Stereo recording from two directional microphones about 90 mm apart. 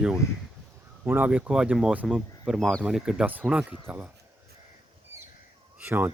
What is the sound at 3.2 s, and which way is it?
Speech, 20° right (ahead or behind).